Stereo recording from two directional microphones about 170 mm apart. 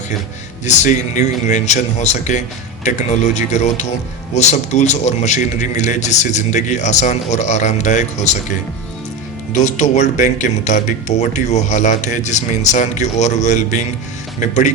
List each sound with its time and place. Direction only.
0.6 s a man's voice: 45° left (ahead or behind)